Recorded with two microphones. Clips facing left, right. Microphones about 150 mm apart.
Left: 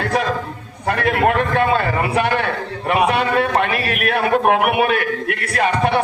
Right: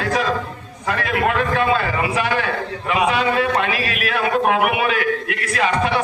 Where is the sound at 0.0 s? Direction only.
55° left (ahead or behind).